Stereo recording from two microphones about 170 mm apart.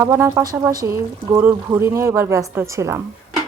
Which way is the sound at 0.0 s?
15° right (ahead or behind).